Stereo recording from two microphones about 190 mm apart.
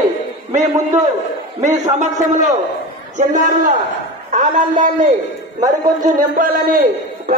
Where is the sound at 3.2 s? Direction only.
40° right (ahead or behind).